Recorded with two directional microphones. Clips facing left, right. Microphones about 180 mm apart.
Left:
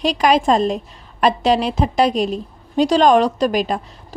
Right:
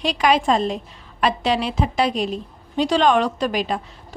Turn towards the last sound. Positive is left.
turn(degrees=45)  # may be behind; listen again after turning